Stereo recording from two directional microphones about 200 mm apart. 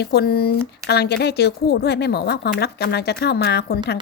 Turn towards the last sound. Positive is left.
turn(degrees=55)  # may be behind; listen again after turning